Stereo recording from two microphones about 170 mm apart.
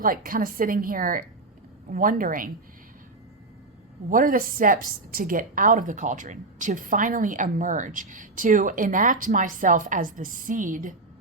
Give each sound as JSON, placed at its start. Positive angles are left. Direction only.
{"t": 0.0, "sound": "a woman's voice", "side_deg": -55}
{"t": 4.1, "sound": "a woman's voice", "side_deg": -55}